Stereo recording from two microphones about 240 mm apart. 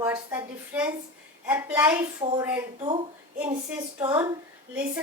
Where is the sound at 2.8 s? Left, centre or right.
Centre.